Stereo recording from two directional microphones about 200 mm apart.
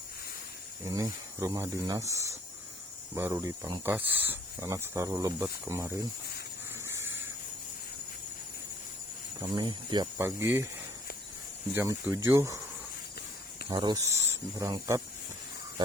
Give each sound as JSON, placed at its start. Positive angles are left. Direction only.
{"t": 0.9, "sound": "speech", "side_deg": -15}
{"t": 6.7, "sound": "spray", "side_deg": -10}
{"t": 9.6, "sound": "speech", "side_deg": -20}
{"t": 11.7, "sound": "speech", "side_deg": -10}
{"t": 13.7, "sound": "speech", "side_deg": -20}